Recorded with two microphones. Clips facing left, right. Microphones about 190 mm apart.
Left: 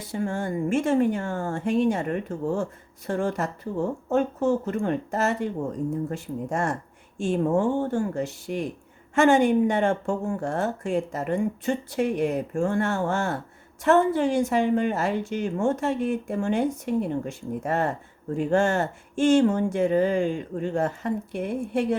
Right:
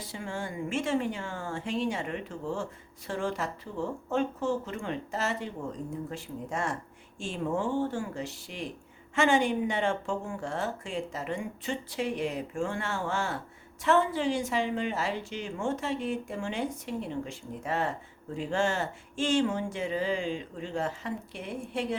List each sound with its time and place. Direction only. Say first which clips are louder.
0.1 s speech: left 10 dB; 45° left (ahead or behind)